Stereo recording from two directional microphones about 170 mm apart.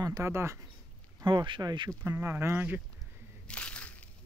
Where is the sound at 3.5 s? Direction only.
5° left (ahead or behind).